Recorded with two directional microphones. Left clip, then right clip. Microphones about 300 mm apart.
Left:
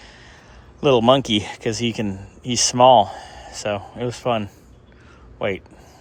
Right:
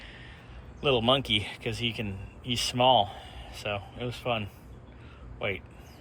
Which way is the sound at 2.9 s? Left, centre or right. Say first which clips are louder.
Left 10 dB; left.